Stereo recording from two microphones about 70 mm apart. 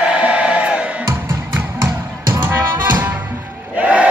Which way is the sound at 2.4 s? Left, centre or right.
Right.